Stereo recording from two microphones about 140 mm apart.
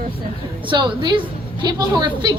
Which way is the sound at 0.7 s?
35° right (ahead or behind).